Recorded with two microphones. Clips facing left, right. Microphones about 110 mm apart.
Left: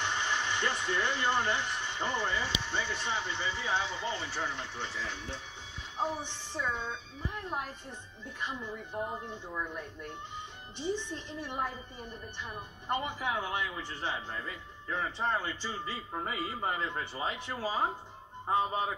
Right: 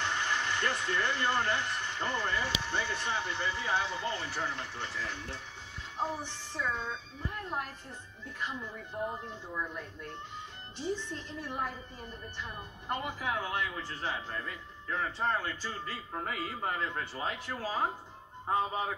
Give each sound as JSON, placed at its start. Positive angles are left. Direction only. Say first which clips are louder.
{"t": 0.0, "sound": "speech", "louder": "even", "side_deg": 20}
{"t": 2.4, "sound": "speech", "louder": "right 1 dB", "side_deg": -10}
{"t": 2.8, "sound": "speech", "louder": "even", "side_deg": 20}
{"t": 9.1, "sound": "a man's voice", "louder": "left 1 dB", "side_deg": 15}
{"t": 12.8, "sound": "a man's voice", "louder": "left 2 dB", "side_deg": 20}